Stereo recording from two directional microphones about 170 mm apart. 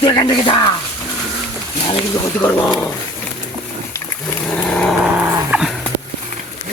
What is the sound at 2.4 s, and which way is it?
Speech, 10° left (ahead or behind).